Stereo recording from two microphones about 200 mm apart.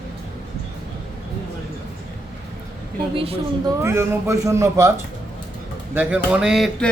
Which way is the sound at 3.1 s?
25° right (ahead or behind).